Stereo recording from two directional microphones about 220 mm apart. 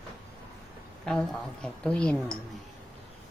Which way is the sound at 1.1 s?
Centre (ahead or behind).